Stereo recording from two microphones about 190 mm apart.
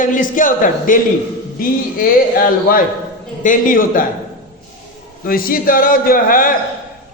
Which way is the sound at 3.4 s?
45° left (ahead or behind).